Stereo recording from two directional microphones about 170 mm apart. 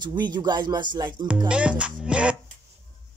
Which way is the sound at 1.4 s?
5° right (ahead or behind).